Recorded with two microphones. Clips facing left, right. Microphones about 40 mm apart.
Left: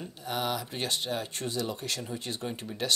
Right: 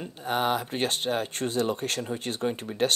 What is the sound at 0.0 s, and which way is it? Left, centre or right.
Speech, right.